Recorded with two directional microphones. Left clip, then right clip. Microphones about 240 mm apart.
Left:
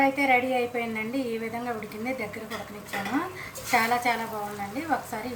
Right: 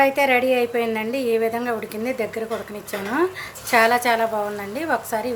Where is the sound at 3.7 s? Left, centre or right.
Right.